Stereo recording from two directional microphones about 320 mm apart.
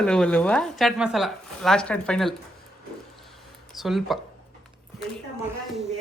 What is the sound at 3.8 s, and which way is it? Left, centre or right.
Speech, centre.